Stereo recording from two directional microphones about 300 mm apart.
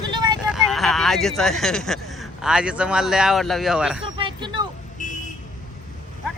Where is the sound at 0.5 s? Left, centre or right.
Centre.